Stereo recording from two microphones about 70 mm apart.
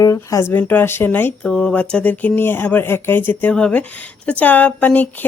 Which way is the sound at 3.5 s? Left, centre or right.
Centre.